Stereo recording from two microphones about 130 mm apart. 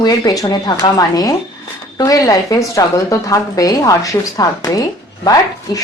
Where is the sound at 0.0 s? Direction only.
30° left (ahead or behind).